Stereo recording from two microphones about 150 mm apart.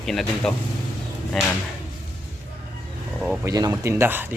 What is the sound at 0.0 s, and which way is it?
Speech, 5° left (ahead or behind).